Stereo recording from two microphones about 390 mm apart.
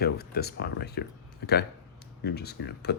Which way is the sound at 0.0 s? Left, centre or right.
Left.